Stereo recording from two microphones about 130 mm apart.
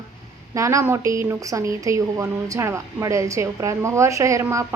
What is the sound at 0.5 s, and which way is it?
A woman's voice, 25° right (ahead or behind).